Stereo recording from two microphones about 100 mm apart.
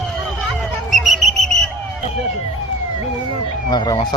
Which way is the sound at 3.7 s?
45° left (ahead or behind).